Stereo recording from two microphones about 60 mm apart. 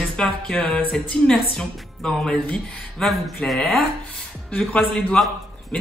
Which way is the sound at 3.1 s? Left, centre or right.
Centre.